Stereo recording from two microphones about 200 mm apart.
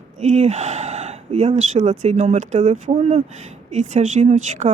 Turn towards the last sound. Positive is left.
turn(degrees=-35)  # may be behind; listen again after turning